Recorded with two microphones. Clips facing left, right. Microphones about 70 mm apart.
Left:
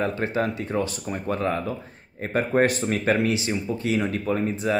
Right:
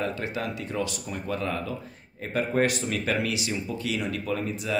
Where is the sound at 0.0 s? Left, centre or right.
Left.